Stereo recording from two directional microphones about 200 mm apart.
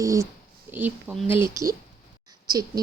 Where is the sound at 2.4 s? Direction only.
20° right (ahead or behind).